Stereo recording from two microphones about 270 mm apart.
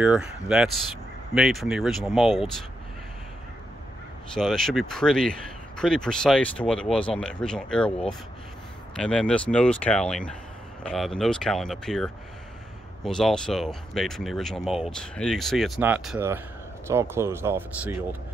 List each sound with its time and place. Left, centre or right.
0.0 s speech: centre
4.4 s speech: centre